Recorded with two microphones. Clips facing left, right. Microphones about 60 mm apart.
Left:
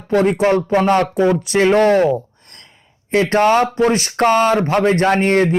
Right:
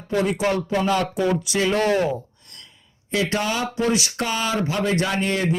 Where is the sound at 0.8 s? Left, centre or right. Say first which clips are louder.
Left 7 dB; left.